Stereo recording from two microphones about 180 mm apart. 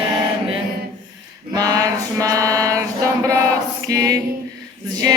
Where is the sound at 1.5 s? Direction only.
20° right (ahead or behind).